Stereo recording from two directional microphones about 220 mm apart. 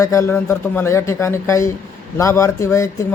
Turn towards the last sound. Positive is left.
turn(degrees=15)  # may be behind; listen again after turning